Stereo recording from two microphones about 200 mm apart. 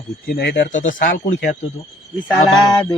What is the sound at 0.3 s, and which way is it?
Speech, 50° left (ahead or behind).